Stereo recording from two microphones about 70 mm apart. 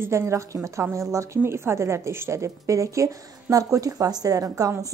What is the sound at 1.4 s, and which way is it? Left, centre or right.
A woman's voice, right.